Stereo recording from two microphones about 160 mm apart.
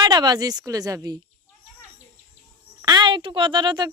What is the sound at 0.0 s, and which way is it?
Speech, 25° right (ahead or behind).